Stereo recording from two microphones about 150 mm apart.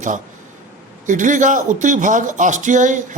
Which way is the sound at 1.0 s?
60° right (ahead or behind).